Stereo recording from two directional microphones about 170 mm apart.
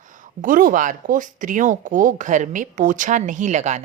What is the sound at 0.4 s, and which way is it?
Speech, 50° right (ahead or behind).